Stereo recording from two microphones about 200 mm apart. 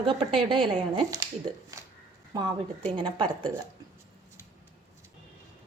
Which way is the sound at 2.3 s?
25° right (ahead or behind).